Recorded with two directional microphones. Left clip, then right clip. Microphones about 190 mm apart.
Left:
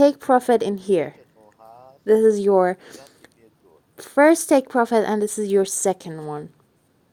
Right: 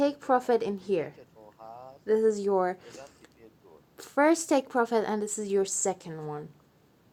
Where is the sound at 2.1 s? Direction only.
45° left (ahead or behind).